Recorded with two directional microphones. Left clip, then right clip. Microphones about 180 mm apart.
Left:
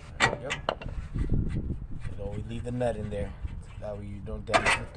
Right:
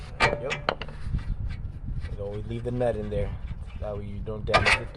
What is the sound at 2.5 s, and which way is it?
Speech, 25° right (ahead or behind).